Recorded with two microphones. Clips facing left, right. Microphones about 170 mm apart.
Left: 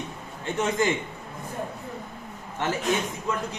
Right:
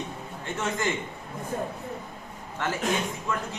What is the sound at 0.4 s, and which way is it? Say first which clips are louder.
Speech: left 5 dB; 20° left (ahead or behind).